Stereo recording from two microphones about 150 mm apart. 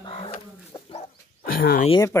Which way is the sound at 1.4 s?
75° left (ahead or behind).